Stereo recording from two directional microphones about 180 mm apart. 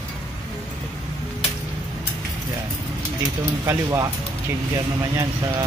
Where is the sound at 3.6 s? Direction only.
15° right (ahead or behind).